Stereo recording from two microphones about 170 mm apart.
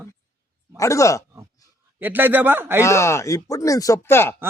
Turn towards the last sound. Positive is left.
turn(degrees=15)  # may be behind; listen again after turning